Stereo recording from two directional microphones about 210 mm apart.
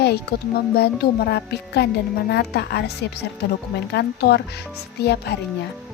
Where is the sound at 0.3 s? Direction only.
45° left (ahead or behind).